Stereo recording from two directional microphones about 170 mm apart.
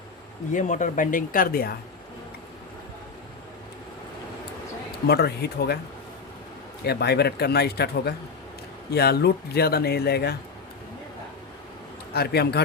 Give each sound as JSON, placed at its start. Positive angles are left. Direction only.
{"t": 0.5, "sound": "speech", "side_deg": 50}
{"t": 5.0, "sound": "speech", "side_deg": 70}
{"t": 6.8, "sound": "speech", "side_deg": 75}
{"t": 12.1, "sound": "speech", "side_deg": 70}